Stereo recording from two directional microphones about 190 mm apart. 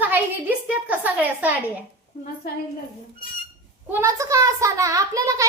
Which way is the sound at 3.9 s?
15° right (ahead or behind).